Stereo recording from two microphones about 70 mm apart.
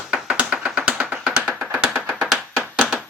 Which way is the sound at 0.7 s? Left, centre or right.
Centre.